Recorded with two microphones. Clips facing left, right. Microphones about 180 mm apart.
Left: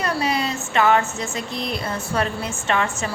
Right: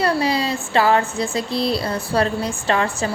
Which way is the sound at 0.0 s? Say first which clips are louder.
Right 4 dB; 30° right (ahead or behind).